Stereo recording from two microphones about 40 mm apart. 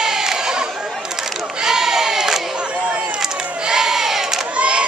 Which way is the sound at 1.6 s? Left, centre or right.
Centre.